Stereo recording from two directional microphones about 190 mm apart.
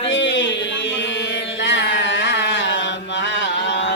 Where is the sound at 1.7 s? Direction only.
70° left (ahead or behind).